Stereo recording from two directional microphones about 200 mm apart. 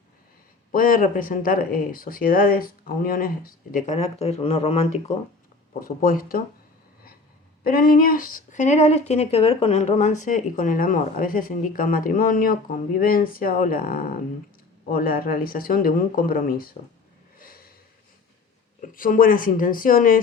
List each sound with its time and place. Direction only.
0.7 s speech: 45° left (ahead or behind)
5.8 s speech: 45° left (ahead or behind)
7.6 s speech: 45° left (ahead or behind)
17.3 s gasp: 45° left (ahead or behind)
18.8 s speech: 45° left (ahead or behind)